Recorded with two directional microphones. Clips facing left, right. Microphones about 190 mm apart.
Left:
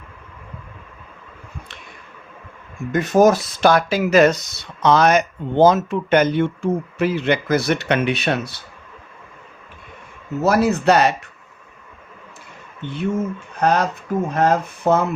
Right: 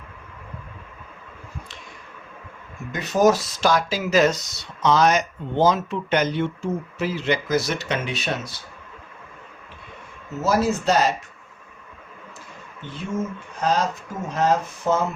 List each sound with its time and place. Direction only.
2.9 s speech: 50° left (ahead or behind)
10.4 s speech: 65° left (ahead or behind)
12.8 s speech: 65° left (ahead or behind)